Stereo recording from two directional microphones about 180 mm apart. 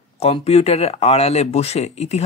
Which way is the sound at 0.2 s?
35° left (ahead or behind).